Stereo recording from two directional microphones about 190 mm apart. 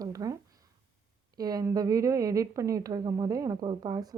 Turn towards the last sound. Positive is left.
turn(degrees=-20)  # may be behind; listen again after turning